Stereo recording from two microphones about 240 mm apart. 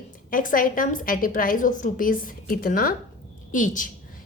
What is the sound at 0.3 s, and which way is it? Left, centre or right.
A woman's voice, left.